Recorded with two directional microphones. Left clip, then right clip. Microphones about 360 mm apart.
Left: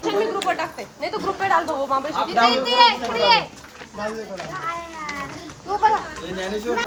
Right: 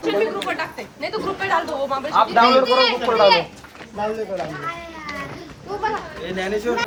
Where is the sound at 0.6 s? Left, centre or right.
Centre.